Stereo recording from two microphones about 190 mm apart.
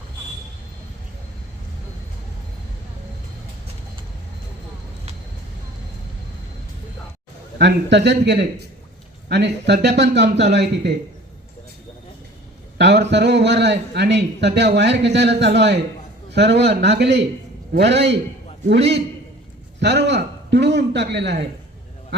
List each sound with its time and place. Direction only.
7.6 s a man's voice: 65° right (ahead or behind)
12.7 s a man's voice: 65° right (ahead or behind)